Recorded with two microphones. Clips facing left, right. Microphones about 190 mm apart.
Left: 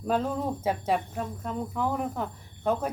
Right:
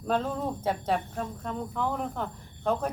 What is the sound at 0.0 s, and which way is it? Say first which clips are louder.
Speech: left 1 dB; 5° left (ahead or behind).